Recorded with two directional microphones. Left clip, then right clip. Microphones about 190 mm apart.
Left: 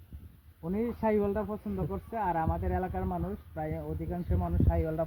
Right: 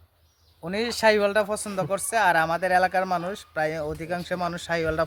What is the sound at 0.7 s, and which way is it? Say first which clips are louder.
Speech: right 9 dB; 35° right (ahead or behind).